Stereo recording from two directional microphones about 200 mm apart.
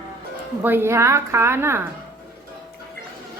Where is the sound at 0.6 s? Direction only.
10° right (ahead or behind).